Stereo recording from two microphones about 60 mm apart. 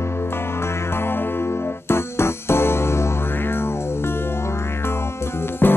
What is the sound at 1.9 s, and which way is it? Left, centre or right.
Keyboard, left.